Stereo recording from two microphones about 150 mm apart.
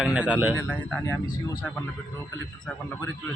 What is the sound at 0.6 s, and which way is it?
Speech, 10° left (ahead or behind).